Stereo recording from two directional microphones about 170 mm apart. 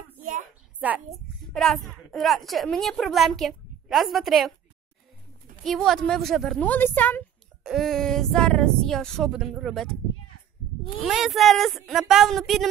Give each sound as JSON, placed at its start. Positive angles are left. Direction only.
{"t": 0.2, "sound": "a sound", "side_deg": -50}
{"t": 0.7, "sound": "a child's voice", "side_deg": -10}
{"t": 1.5, "sound": "a woman's voice", "side_deg": 0}
{"t": 5.6, "sound": "a woman's voice", "side_deg": 0}
{"t": 7.6, "sound": "a woman's voice", "side_deg": 0}
{"t": 11.0, "sound": "a woman's voice", "side_deg": 0}